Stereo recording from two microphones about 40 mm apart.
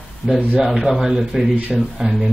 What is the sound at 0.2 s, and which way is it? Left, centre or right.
Speech, left.